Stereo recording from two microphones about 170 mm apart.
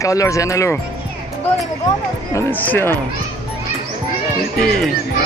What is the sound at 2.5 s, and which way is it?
Speech, 10° left (ahead or behind).